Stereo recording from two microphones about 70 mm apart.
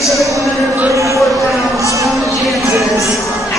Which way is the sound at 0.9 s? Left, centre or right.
Right.